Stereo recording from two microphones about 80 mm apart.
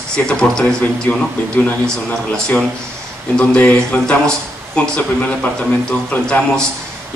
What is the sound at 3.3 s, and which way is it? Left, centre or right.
Speech, centre.